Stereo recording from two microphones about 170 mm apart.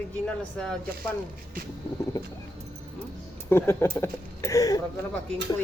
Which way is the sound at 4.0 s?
20° left (ahead or behind).